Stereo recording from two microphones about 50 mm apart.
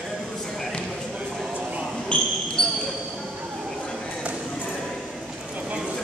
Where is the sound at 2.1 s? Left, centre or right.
Left.